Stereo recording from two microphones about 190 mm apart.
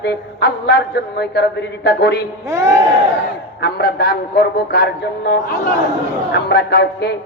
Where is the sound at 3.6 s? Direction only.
55° left (ahead or behind).